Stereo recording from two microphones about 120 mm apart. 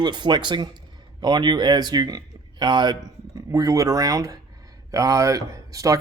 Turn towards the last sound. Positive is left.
turn(degrees=-25)  # may be behind; listen again after turning